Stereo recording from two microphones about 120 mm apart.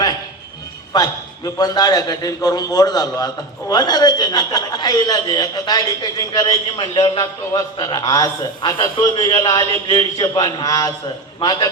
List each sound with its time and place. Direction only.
0.9 s a man's voice: 35° left (ahead or behind)
6.7 s a man's voice: 45° left (ahead or behind)
10.2 s a man's voice: 35° left (ahead or behind)